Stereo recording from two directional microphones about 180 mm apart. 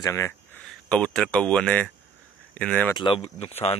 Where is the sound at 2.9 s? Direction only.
30° left (ahead or behind).